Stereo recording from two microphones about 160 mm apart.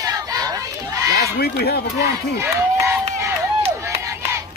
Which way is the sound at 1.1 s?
80° left.